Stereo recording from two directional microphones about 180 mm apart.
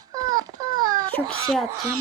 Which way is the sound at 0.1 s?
20° right (ahead or behind).